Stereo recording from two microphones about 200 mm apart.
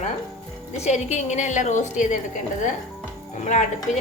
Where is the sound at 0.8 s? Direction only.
35° left (ahead or behind).